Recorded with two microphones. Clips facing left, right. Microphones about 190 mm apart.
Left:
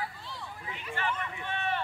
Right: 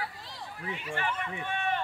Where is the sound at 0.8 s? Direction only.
15° right (ahead or behind).